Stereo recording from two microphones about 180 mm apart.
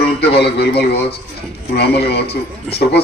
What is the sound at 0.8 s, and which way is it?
A man's voice, 65° left (ahead or behind).